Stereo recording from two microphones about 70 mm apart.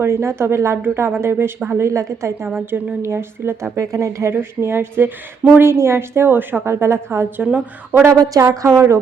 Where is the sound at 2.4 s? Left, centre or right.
Right.